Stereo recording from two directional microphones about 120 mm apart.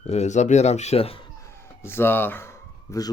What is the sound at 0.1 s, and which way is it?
Speech, 70° left (ahead or behind).